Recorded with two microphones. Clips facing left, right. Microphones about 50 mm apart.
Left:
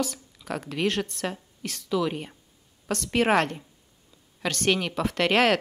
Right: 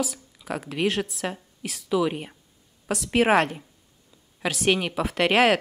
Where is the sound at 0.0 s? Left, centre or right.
Centre.